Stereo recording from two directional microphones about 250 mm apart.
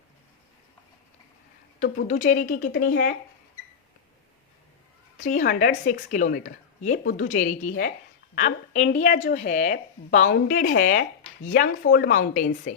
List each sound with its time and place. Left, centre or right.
1.8 s a woman's voice: left
5.1 s a woman's voice: left